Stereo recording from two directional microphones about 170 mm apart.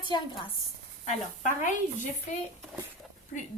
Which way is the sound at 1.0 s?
50° left (ahead or behind).